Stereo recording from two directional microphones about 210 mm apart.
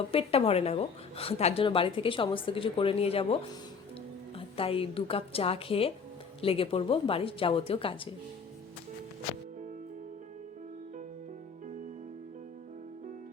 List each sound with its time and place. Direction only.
0.1 s a woman's voice: 25° left (ahead or behind)